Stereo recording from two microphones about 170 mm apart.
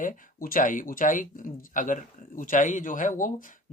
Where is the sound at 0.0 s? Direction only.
55° left (ahead or behind).